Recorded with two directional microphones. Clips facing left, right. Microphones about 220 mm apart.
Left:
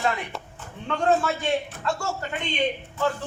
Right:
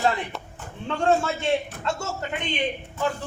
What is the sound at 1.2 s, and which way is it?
A man's voice, 25° right (ahead or behind).